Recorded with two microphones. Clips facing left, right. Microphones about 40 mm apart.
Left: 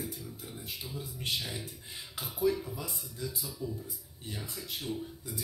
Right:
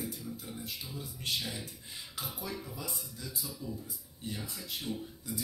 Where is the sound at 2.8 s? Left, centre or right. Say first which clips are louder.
Left 3 dB; left.